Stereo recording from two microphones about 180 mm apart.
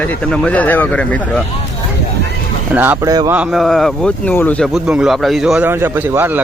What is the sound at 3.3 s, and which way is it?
Speech, 5° right (ahead or behind).